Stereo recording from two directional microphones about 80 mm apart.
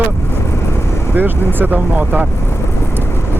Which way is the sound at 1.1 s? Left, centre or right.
Right.